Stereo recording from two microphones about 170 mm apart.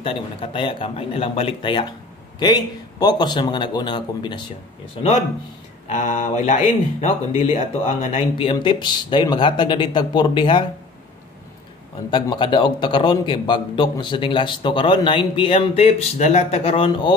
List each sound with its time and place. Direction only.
0.0 s a man's voice: 30° left (ahead or behind)
5.9 s speech: 50° left (ahead or behind)
8.4 s a man's voice: 30° left (ahead or behind)
12.1 s a man's voice: 30° left (ahead or behind)